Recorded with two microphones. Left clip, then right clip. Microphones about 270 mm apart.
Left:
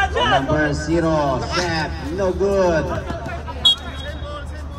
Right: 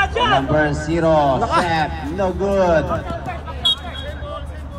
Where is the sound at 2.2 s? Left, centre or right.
Right.